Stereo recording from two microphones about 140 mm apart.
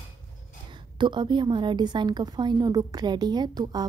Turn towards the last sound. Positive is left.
turn(degrees=-30)  # may be behind; listen again after turning